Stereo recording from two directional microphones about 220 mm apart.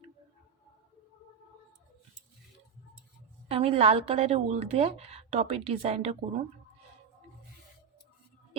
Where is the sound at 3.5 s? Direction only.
25° right (ahead or behind).